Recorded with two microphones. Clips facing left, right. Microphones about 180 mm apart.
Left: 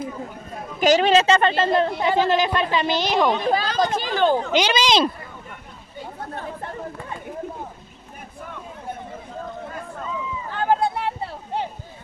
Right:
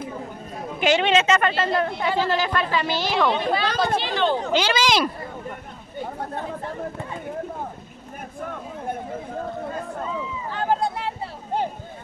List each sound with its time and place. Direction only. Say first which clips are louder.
0.7 s speech: left 3 dB; 40° left (ahead or behind); by 3.3 s 20° left (ahead or behind)
3.3 s speech: left 1 dB; 45° left (ahead or behind)
4.5 s speech: left 1 dB; 20° left (ahead or behind)
10.5 s a sound: left 3 dB; 60° left (ahead or behind)